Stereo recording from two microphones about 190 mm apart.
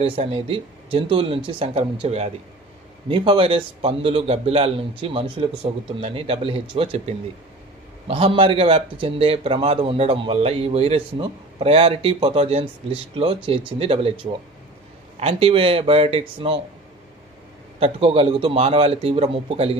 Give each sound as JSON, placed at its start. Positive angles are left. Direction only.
{"t": 0.0, "sound": "a man's voice", "side_deg": -30}
{"t": 17.7, "sound": "a man's voice", "side_deg": -30}